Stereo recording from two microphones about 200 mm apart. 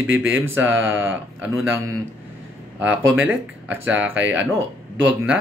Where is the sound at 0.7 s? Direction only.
75° right (ahead or behind).